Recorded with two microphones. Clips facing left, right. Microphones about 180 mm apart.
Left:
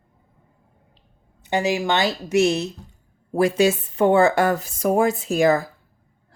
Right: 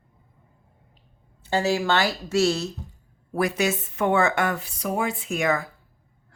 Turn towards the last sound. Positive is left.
turn(degrees=35)  # may be behind; listen again after turning